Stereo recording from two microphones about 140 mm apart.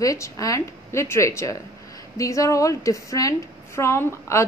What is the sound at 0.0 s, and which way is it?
A woman's voice, 25° left (ahead or behind).